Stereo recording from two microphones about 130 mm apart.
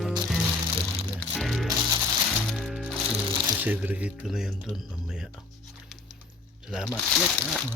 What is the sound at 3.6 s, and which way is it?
Speech, 15° right (ahead or behind).